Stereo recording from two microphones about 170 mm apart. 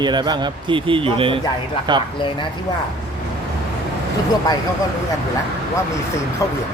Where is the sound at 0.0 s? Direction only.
25° right (ahead or behind).